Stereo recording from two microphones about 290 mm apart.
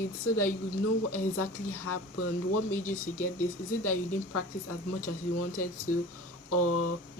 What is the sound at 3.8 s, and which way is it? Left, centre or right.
Speech, left.